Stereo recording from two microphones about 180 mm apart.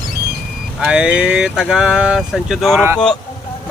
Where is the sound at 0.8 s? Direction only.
5° right (ahead or behind).